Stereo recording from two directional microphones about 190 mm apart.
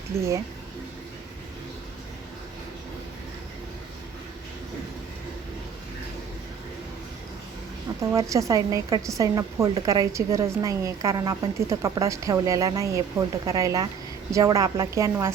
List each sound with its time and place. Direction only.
8.1 s a woman's voice: 15° right (ahead or behind)